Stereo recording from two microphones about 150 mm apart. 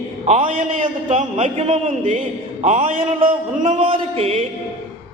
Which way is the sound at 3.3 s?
55° right (ahead or behind).